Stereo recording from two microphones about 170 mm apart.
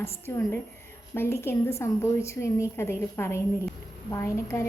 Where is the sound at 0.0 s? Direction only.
15° left (ahead or behind).